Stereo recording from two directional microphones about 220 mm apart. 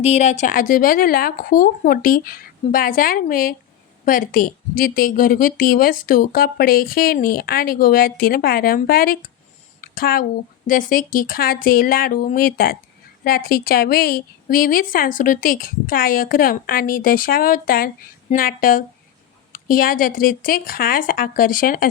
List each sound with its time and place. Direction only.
0.0 s a woman's voice: 30° left (ahead or behind)
9.8 s a sound: 40° left (ahead or behind)
10.7 s a woman's voice: 40° left (ahead or behind)